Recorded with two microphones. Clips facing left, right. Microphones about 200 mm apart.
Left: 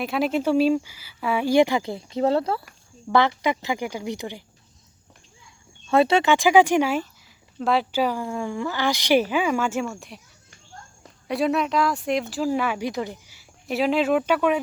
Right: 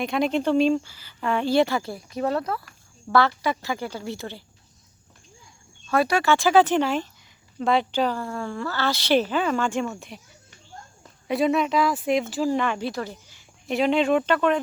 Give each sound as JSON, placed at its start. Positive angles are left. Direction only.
{"t": 0.0, "sound": "speech", "side_deg": 5}
{"t": 5.9, "sound": "speech", "side_deg": 25}
{"t": 11.3, "sound": "speech", "side_deg": 0}
{"t": 12.9, "sound": "speech", "side_deg": 15}